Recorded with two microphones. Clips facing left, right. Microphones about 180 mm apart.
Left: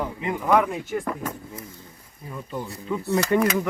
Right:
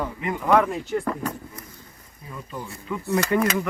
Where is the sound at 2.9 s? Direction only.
25° left (ahead or behind).